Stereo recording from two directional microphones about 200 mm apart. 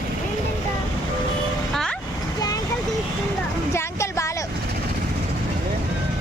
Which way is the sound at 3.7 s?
15° left (ahead or behind).